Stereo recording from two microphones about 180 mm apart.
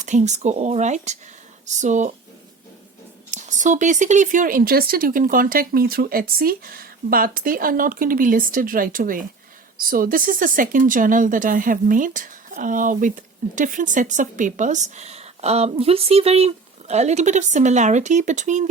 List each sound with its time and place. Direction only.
0.0 s speech: 40° right (ahead or behind)
3.3 s speech: 45° right (ahead or behind)